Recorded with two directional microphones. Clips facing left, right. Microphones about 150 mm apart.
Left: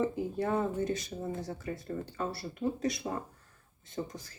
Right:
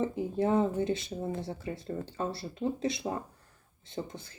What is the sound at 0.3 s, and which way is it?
Speech, 20° right (ahead or behind).